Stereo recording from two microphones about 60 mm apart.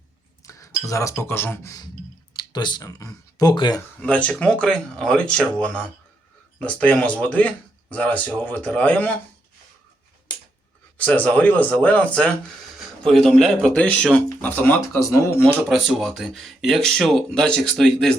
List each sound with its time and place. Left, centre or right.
0.4 s chink: left
1.2 s speech: left
2.8 s speech: left
4.0 s speech: left
10.9 s speech: left
13.1 s speech: centre
14.4 s speech: left
14.8 s speech: left
15.7 s speech: centre